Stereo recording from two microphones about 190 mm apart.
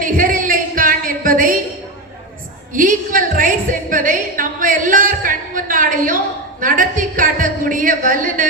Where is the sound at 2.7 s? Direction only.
45° right (ahead or behind).